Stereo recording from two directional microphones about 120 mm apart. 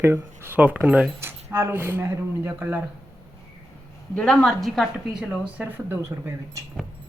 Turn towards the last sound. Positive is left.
turn(degrees=-20)  # may be behind; listen again after turning